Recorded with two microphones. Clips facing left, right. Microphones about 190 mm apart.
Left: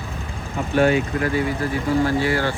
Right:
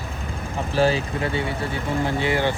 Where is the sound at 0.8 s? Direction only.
30° right (ahead or behind).